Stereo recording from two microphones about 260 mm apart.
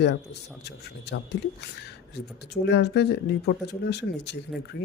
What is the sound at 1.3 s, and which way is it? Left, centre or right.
Speech, left.